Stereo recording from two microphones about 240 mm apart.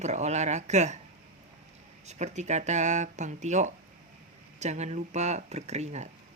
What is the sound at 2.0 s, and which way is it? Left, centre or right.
Speech, right.